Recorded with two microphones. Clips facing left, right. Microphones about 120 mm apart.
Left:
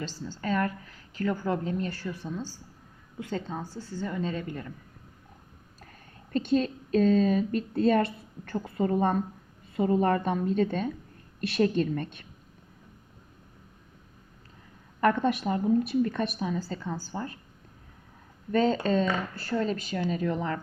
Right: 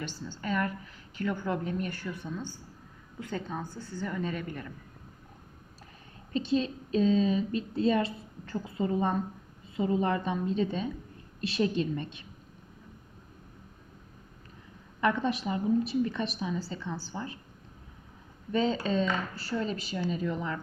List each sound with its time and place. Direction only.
0.3 s a woman's voice: 35° left (ahead or behind)
6.3 s a woman's voice: 50° left (ahead or behind)
15.0 s a woman's voice: 50° left (ahead or behind)
18.5 s a woman's voice: 45° left (ahead or behind)